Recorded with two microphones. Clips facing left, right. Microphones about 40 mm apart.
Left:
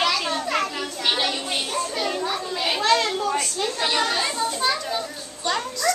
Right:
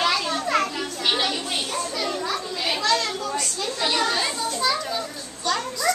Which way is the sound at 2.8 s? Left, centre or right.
Left.